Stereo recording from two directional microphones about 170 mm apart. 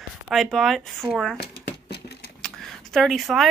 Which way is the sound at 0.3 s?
Centre (ahead or behind).